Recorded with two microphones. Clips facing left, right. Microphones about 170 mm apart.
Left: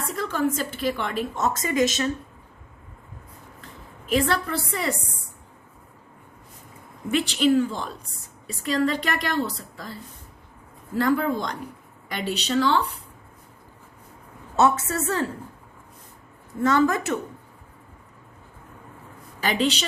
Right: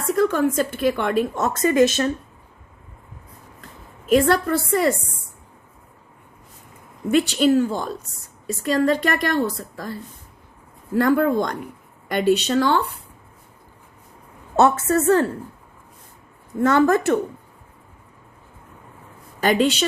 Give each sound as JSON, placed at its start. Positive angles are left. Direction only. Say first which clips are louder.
{"t": 0.2, "sound": "a woman's voice", "louder": "right 6 dB", "side_deg": -50}
{"t": 4.1, "sound": "a woman's voice", "louder": "right 6 dB", "side_deg": -45}
{"t": 7.1, "sound": "a woman's voice", "louder": "right 4 dB", "side_deg": -40}
{"t": 14.5, "sound": "a woman's voice", "louder": "right 4 dB", "side_deg": -50}
{"t": 16.6, "sound": "a woman's voice", "louder": "right 4 dB", "side_deg": -55}
{"t": 19.4, "sound": "a woman's voice", "louder": "right 5 dB", "side_deg": -45}